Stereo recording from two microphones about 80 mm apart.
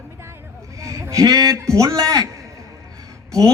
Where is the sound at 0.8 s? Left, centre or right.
Right.